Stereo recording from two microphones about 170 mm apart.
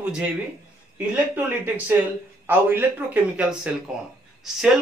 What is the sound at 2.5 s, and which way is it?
A man's voice, 10° right (ahead or behind).